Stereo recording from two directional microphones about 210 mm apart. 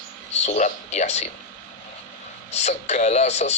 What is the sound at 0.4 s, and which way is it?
Speech, 35° left (ahead or behind).